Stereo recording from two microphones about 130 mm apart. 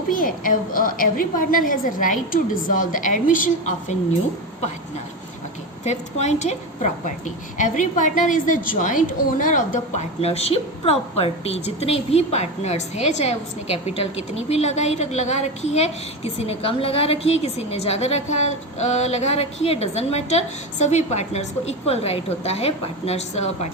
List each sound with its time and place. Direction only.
0.1 s a woman's voice: 90° left
5.8 s a woman's voice: 60° left (ahead or behind)
7.6 s a woman's voice: 75° left (ahead or behind); by 23.6 s 60° left (ahead or behind)